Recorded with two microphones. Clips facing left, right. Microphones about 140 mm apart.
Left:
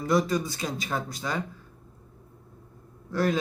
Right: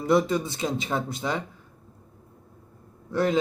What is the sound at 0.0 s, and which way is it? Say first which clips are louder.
Speech: right 2 dB; 25° right (ahead or behind).